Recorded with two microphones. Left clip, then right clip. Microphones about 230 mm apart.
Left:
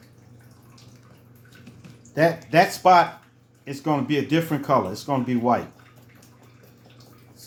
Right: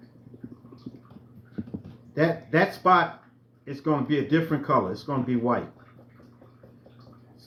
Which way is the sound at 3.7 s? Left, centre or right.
Centre.